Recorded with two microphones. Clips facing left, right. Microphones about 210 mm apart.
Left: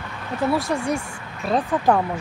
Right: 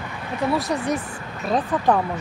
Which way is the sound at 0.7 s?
30° left (ahead or behind).